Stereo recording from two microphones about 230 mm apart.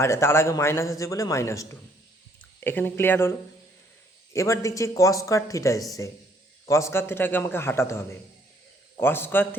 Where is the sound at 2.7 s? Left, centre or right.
Centre.